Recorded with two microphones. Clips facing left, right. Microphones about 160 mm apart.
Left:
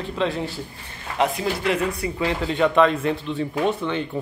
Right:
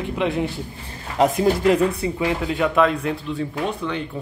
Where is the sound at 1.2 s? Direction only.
40° right (ahead or behind).